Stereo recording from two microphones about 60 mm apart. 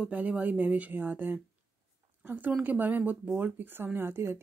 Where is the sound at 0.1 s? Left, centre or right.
Right.